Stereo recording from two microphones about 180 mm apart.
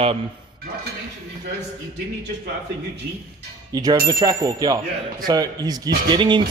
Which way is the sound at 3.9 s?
20° right (ahead or behind).